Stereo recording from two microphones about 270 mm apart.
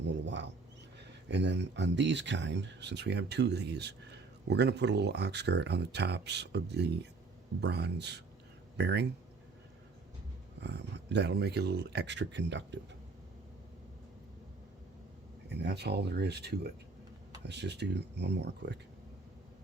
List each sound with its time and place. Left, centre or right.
0.1 s a sound: right
1.3 s speech: right
10.6 s speech: right
15.4 s speech: right